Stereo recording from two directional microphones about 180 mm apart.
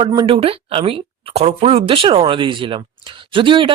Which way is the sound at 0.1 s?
25° right (ahead or behind).